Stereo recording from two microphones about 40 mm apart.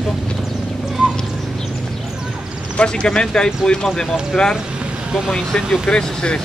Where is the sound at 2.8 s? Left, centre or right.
Left.